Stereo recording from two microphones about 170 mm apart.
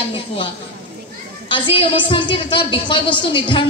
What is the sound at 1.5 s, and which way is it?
A woman's voice, 30° left (ahead or behind).